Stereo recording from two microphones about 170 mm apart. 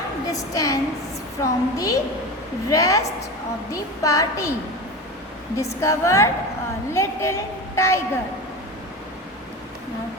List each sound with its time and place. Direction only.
0.3 s a woman's voice: 20° left (ahead or behind)
5.8 s a woman's voice: 15° left (ahead or behind)